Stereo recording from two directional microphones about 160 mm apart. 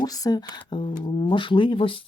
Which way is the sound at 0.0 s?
25° left (ahead or behind).